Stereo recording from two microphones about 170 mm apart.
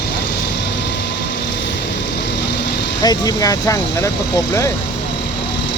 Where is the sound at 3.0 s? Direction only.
20° left (ahead or behind).